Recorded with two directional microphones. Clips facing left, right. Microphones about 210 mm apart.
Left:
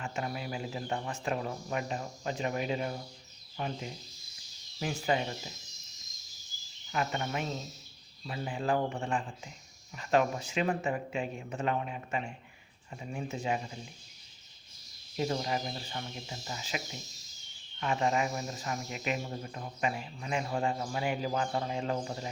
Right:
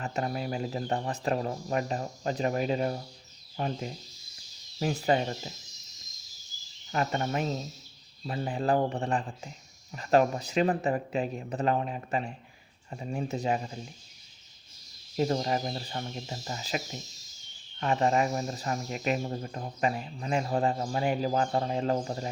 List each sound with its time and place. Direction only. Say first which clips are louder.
0.0 s speech: right 5 dB; 40° right (ahead or behind)
6.9 s speech: right 4 dB; 40° right (ahead or behind)
15.1 s speech: right 4 dB; 40° right (ahead or behind)